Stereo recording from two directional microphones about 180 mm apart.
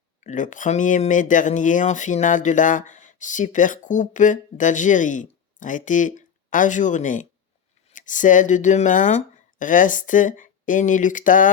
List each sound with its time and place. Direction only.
0.2 s speech: 45° left (ahead or behind)